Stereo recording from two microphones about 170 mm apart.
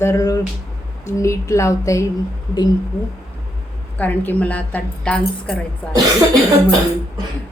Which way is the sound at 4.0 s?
10° left (ahead or behind).